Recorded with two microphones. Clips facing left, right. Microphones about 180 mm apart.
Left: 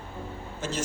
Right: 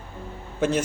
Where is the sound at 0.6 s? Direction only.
55° right (ahead or behind).